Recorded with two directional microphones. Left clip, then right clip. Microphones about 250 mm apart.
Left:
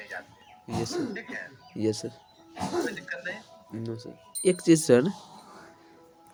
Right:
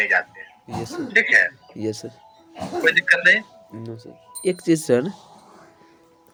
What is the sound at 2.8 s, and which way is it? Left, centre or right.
Speech, right.